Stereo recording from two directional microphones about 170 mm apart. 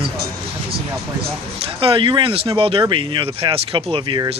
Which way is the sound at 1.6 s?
35° right (ahead or behind).